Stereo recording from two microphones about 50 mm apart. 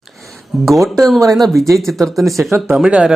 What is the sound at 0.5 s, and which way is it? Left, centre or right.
Speech, centre.